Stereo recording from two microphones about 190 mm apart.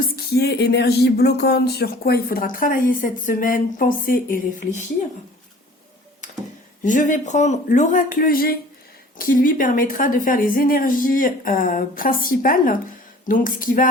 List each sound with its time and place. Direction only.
0.0 s speech: 55° left (ahead or behind)
6.8 s speech: 45° left (ahead or behind)